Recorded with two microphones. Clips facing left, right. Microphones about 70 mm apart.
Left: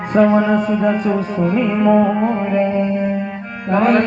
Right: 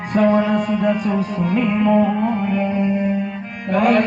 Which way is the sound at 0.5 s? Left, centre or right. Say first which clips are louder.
Left 2 dB; left.